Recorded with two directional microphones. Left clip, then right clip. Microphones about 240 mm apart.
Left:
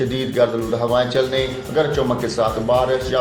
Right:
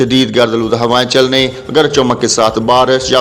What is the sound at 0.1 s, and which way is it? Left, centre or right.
A man's voice, right.